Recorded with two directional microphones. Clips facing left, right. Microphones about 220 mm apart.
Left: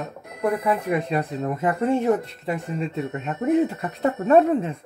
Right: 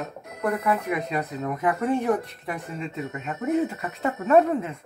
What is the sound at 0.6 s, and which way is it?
Speech, 30° left (ahead or behind).